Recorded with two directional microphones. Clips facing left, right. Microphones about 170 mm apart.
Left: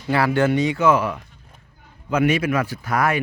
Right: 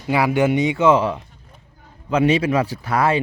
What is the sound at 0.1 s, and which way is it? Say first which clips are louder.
Speech: right 1 dB; 15° right (ahead or behind).